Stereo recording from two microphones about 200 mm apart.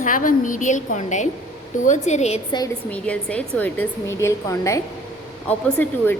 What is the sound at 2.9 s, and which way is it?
A woman's voice, 5° left (ahead or behind).